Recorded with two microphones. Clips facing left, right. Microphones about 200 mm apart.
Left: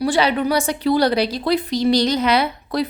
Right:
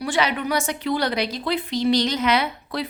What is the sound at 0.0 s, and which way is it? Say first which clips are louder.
A woman's voice: left 5 dB; 35° left (ahead or behind).